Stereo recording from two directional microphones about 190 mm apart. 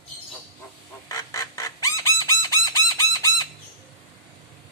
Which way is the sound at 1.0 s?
15° left (ahead or behind).